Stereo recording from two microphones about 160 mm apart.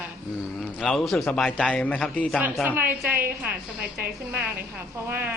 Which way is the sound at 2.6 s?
10° right (ahead or behind).